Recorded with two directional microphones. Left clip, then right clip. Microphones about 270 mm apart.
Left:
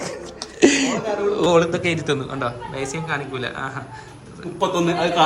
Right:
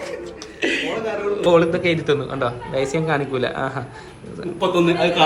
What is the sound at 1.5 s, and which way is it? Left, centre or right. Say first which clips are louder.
A man's voice: right 5 dB; centre.